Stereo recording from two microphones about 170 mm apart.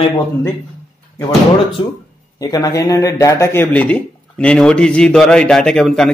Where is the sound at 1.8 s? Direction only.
30° left (ahead or behind).